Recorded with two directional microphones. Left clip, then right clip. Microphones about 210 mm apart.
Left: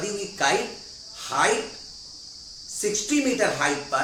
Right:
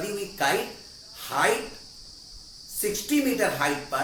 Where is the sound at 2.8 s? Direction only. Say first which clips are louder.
Left 2 dB; centre (ahead or behind).